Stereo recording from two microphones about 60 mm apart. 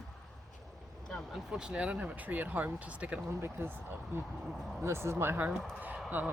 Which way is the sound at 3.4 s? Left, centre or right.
Right.